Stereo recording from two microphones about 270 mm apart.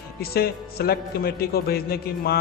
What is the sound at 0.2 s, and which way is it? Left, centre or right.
A man's voice, left.